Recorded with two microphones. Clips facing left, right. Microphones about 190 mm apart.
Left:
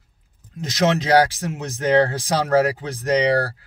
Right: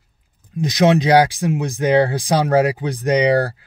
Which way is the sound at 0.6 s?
15° right (ahead or behind).